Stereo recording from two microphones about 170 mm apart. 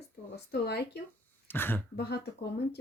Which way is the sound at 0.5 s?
75° left (ahead or behind).